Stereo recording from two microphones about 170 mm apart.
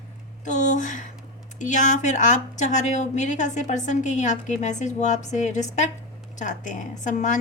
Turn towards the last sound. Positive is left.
turn(degrees=45)  # may be behind; listen again after turning